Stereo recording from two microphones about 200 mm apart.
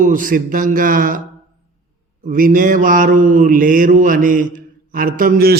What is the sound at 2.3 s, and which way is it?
Mantra, 45° right (ahead or behind).